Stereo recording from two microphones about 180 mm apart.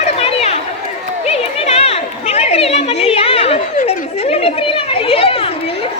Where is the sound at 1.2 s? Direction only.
35° left (ahead or behind).